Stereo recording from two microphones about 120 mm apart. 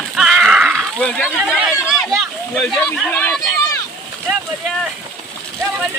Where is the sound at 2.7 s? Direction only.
10° left (ahead or behind).